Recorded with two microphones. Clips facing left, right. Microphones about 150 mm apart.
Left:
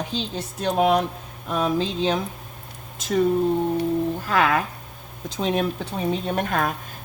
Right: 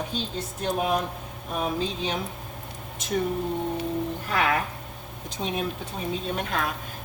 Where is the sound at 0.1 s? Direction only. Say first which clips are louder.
Left 3 dB; 70° left (ahead or behind).